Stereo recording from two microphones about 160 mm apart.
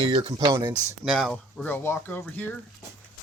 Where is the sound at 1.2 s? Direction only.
5° left (ahead or behind).